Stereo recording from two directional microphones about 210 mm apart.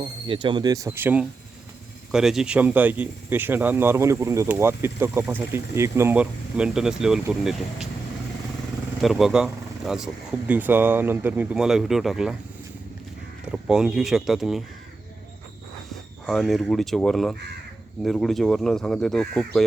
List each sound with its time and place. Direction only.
0.0 s speech: 25° right (ahead or behind); by 7.9 s centre (ahead or behind)
9.0 s speech: centre (ahead or behind)
13.7 s speech: 5° right (ahead or behind)
15.9 s speech: centre (ahead or behind)